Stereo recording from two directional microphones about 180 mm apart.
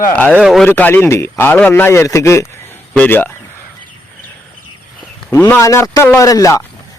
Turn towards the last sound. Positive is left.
turn(degrees=20)  # may be behind; listen again after turning